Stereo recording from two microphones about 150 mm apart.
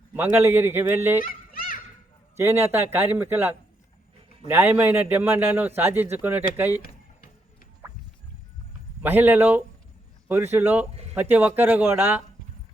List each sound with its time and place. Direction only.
0.1 s a man's voice: 15° right (ahead or behind)
1.2 s children playing: 70° left (ahead or behind)
2.3 s a man's voice: 15° right (ahead or behind)
9.0 s a man's voice: 10° right (ahead or behind)